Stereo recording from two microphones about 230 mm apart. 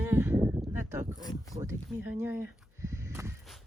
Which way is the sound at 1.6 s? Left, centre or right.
Centre.